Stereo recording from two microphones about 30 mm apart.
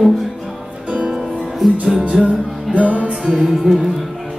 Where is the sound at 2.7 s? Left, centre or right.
Right.